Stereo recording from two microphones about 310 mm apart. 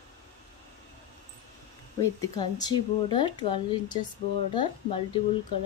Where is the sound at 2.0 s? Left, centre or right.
Centre.